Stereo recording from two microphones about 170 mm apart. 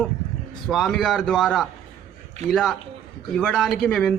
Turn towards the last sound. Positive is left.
turn(degrees=5)  # may be behind; listen again after turning